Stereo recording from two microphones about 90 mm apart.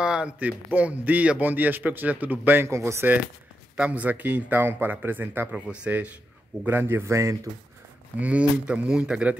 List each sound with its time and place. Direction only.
0.0 s a man's voice: 10° right (ahead or behind); by 3.1 s 35° right (ahead or behind)
3.7 s a man's voice: 15° right (ahead or behind); by 7.3 s 35° right (ahead or behind)
8.2 s speech: 15° right (ahead or behind)